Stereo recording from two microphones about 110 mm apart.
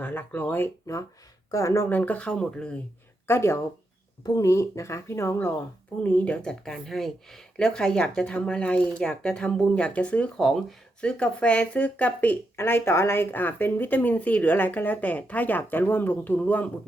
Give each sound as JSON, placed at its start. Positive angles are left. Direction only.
{"t": 0.0, "sound": "speech", "side_deg": 15}
{"t": 3.2, "sound": "speech", "side_deg": 25}